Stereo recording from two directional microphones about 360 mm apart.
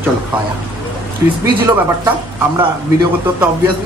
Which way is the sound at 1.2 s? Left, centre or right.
Centre.